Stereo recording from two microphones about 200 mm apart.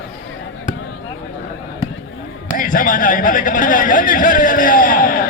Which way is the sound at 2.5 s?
45° left (ahead or behind).